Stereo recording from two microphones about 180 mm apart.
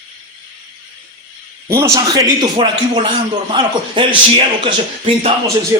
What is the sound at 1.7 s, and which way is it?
A man's voice, 20° right (ahead or behind).